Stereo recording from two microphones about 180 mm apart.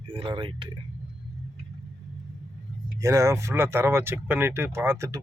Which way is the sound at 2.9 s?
15° right (ahead or behind).